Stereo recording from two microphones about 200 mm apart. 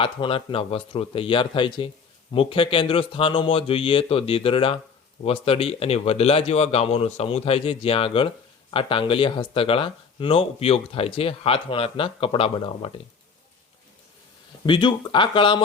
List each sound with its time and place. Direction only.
0.0 s speech: 25° left (ahead or behind)
14.7 s speech: 25° left (ahead or behind)